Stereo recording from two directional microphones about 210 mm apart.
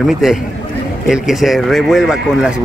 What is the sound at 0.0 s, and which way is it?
Speech, centre (ahead or behind).